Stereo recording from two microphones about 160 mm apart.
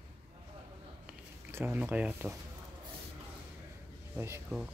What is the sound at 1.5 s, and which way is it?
Speech, 10° right (ahead or behind).